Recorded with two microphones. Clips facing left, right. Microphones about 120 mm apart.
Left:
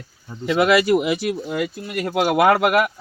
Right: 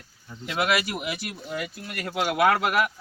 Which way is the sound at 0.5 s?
90° left.